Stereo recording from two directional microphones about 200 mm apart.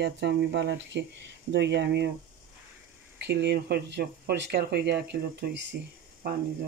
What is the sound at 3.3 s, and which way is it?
Speech, 60° right (ahead or behind).